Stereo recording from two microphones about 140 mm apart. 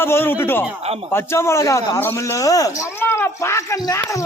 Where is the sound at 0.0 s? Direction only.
15° left (ahead or behind).